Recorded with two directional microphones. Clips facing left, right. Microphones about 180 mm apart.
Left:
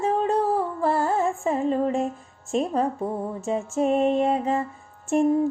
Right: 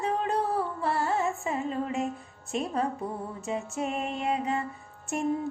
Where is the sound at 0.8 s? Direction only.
45° left (ahead or behind).